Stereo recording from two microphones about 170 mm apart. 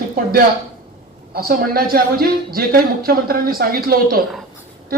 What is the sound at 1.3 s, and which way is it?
Speech, 60° right (ahead or behind).